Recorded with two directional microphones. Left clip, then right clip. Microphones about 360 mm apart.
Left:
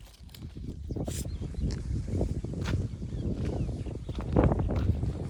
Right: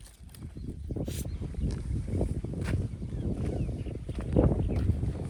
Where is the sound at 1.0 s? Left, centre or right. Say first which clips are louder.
Left 1 dB; centre.